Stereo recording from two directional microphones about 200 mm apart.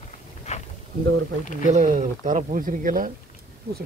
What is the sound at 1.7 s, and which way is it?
Speech, 40° right (ahead or behind).